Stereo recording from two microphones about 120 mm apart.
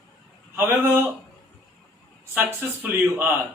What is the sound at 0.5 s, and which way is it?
Speech, 15° right (ahead or behind).